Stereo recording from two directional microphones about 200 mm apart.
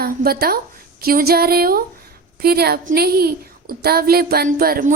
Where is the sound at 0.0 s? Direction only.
50° right (ahead or behind).